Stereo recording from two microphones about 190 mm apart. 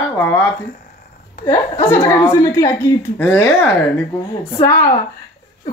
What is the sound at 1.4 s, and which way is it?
Speech, 25° left (ahead or behind).